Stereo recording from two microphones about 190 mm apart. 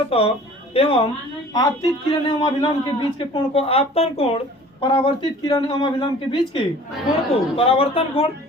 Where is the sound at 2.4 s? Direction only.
25° left (ahead or behind).